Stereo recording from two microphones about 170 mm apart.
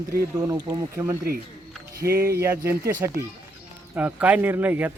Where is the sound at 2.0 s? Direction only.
65° right (ahead or behind).